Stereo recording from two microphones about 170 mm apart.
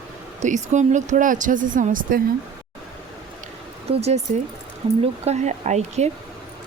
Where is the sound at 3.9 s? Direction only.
40° right (ahead or behind).